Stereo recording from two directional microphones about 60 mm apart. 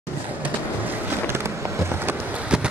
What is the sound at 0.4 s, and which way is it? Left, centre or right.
Train, right.